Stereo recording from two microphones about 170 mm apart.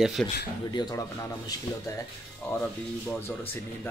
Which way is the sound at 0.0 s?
Centre (ahead or behind).